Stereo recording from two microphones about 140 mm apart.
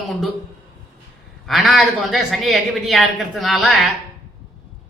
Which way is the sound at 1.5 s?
Centre (ahead or behind).